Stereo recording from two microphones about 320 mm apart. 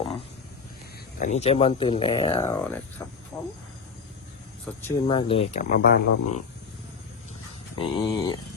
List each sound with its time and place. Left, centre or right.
1.2 s speech: left
4.8 s speech: centre; by 6.0 s left
6.1 s speech: left
7.8 s speech: centre